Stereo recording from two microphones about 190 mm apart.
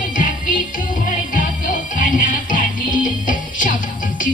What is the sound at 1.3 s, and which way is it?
Music, 45° left (ahead or behind).